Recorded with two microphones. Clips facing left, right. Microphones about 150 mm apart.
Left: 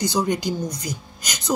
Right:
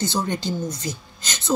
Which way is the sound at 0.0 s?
15° left (ahead or behind).